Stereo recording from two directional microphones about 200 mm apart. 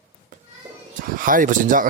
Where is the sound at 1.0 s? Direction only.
45° right (ahead or behind).